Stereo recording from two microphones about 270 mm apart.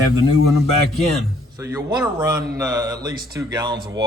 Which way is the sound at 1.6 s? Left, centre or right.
Centre.